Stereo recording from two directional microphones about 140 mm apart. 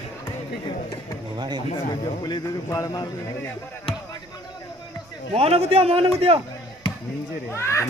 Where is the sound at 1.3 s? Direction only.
30° right (ahead or behind).